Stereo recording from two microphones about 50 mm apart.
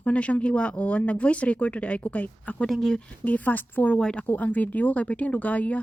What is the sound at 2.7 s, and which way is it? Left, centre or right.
Speech, centre.